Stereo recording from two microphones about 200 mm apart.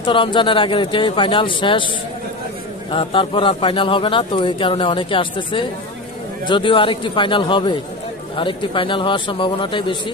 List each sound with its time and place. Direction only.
0.0 s speech: 25° left (ahead or behind)
2.9 s speech: 25° left (ahead or behind)